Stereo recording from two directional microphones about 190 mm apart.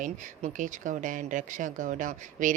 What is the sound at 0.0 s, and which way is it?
Speech, 45° right (ahead or behind).